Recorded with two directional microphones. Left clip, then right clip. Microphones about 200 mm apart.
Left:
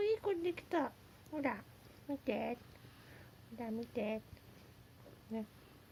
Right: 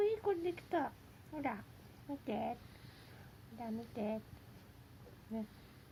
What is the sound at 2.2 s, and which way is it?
Speech, 40° left (ahead or behind).